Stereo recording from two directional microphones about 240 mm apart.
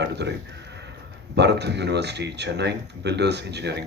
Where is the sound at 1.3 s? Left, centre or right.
Right.